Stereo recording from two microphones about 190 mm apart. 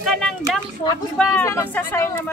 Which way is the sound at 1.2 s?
10° left (ahead or behind).